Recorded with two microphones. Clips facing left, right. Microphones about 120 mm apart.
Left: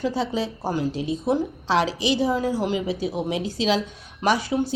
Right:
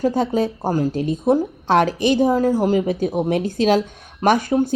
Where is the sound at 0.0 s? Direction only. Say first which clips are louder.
Right 6 dB; 50° right (ahead or behind).